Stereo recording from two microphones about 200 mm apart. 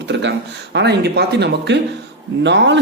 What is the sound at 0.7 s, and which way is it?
A woman's voice, 55° right (ahead or behind).